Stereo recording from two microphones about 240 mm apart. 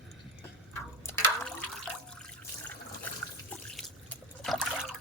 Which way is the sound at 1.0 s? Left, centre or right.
Centre.